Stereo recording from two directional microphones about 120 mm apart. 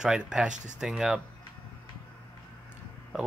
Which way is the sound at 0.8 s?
5° right (ahead or behind).